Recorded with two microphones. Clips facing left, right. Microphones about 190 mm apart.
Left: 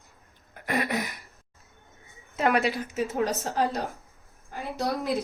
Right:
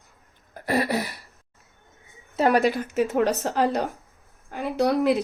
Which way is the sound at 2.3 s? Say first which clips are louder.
Right 4 dB; 35° right (ahead or behind).